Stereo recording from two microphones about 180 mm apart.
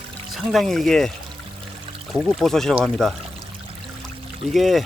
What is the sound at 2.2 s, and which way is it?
Speech, centre (ahead or behind).